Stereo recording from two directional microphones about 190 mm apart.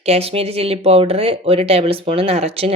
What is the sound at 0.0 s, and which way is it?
Speech, 30° right (ahead or behind).